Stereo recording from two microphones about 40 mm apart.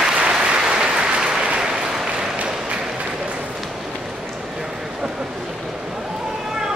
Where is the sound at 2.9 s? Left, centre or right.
Right.